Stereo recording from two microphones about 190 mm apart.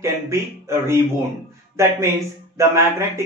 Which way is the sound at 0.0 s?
15° right (ahead or behind).